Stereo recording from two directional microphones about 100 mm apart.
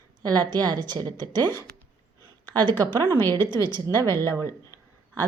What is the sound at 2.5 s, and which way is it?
Speech, 45° right (ahead or behind).